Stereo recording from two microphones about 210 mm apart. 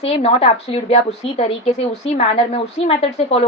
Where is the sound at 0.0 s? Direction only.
30° left (ahead or behind).